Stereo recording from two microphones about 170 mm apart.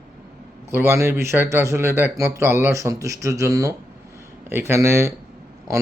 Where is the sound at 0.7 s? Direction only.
15° right (ahead or behind).